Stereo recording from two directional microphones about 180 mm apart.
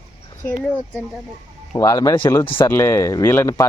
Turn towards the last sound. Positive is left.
turn(degrees=15)  # may be behind; listen again after turning